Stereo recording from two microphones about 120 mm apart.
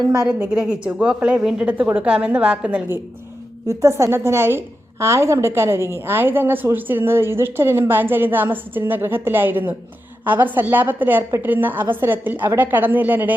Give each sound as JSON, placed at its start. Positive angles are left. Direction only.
{"t": 0.3, "sound": "a woman's voice", "side_deg": -10}
{"t": 3.7, "sound": "a woman's voice", "side_deg": -25}